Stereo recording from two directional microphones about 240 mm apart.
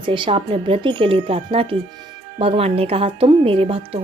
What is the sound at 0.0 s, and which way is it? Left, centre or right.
Speech, right.